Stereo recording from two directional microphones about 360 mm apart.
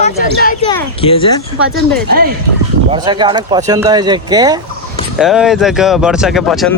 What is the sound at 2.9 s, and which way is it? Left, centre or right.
Speech, centre.